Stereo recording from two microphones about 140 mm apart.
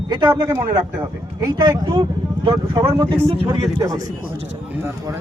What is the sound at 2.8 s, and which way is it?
Speech, 15° right (ahead or behind).